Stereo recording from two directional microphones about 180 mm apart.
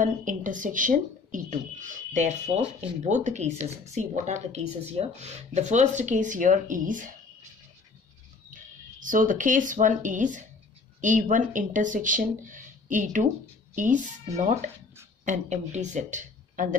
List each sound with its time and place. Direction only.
0.0 s speech: 45° right (ahead or behind)
8.5 s speech: 45° right (ahead or behind)